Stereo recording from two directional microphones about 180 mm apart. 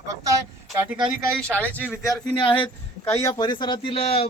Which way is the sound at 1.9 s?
20° left (ahead or behind).